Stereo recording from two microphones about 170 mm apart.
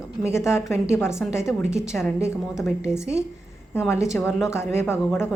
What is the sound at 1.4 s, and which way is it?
Speech, 5° right (ahead or behind).